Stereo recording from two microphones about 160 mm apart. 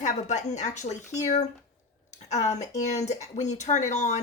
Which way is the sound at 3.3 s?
45° left (ahead or behind).